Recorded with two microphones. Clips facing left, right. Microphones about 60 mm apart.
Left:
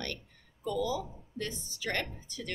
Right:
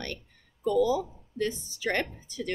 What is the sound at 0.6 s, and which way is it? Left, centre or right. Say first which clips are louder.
A woman's voice: right 8 dB; right.